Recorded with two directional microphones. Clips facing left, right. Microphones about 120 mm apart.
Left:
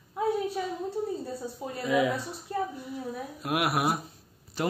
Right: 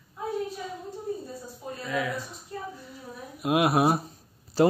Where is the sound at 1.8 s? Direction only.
20° left (ahead or behind).